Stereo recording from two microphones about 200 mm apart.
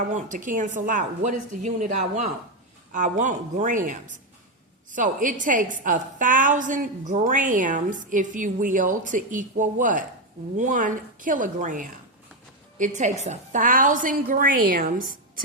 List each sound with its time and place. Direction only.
0.1 s a woman's voice: 40° right (ahead or behind)